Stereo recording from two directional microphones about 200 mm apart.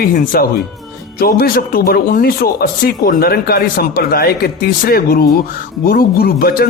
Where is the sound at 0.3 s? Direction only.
50° left (ahead or behind).